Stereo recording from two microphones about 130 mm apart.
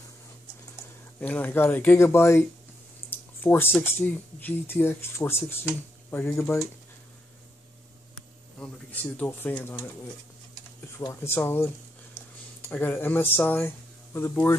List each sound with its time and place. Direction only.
1.2 s speech: 15° left (ahead or behind)
8.5 s speech: 10° left (ahead or behind)
10.9 s speech: 25° left (ahead or behind)